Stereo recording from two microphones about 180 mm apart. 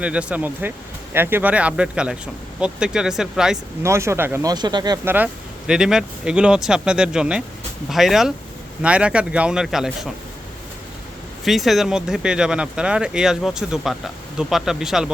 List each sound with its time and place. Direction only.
0.0 s speech: 5° right (ahead or behind)
3.8 s speech: 15° right (ahead or behind)
5.0 s speech: 10° right (ahead or behind)
11.4 s speech: centre (ahead or behind)